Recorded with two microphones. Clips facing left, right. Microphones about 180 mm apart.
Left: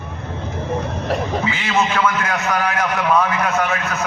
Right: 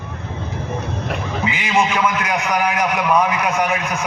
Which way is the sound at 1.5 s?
15° right (ahead or behind).